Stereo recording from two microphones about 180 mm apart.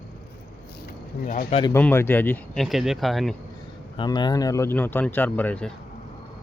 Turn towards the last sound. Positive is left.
turn(degrees=5)  # may be behind; listen again after turning